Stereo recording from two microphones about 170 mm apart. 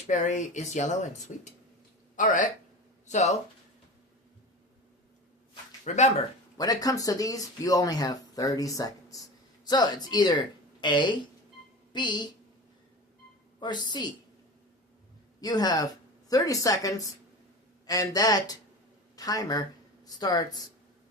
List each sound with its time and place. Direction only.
0.1 s speech: 45° left (ahead or behind)
5.8 s speech: 40° left (ahead or behind)
6.6 s a woman's voice: 20° left (ahead or behind)
13.6 s speech: 25° left (ahead or behind)
15.4 s speech: 25° left (ahead or behind)